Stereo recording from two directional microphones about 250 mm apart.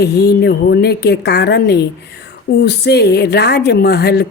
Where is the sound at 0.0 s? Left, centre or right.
Left.